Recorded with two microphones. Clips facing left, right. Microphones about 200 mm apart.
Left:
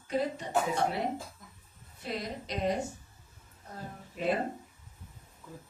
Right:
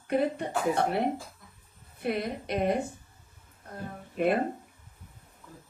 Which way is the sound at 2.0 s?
60° right (ahead or behind).